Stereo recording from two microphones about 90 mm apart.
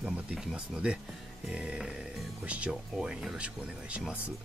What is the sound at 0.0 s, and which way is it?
Speech, 15° right (ahead or behind).